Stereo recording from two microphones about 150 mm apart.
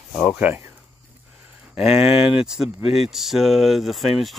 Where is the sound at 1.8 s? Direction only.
5° right (ahead or behind).